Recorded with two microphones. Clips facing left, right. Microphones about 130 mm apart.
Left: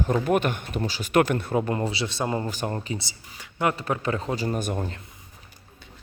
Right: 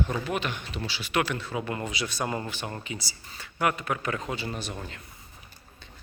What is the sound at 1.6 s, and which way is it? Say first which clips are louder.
Speech: left 5 dB; 30° left (ahead or behind).